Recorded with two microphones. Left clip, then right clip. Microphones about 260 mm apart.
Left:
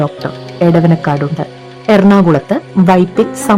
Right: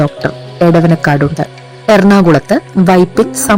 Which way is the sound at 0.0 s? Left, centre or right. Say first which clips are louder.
Right 3 dB; centre.